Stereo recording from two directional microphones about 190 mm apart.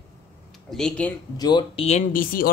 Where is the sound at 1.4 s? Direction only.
25° left (ahead or behind); by 2.5 s 45° left (ahead or behind).